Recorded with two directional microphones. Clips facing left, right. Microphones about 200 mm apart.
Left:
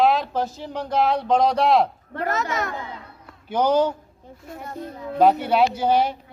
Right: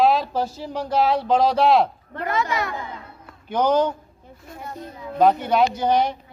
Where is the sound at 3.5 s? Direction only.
10° left (ahead or behind).